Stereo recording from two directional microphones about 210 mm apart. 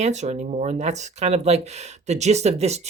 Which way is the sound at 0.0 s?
35° right (ahead or behind).